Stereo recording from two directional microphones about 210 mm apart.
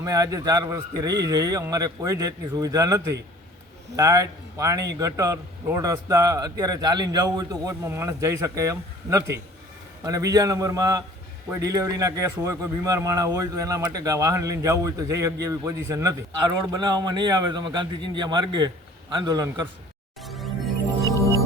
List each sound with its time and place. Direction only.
0.0 s a man's voice: 15° right (ahead or behind)
20.2 s music: centre (ahead or behind)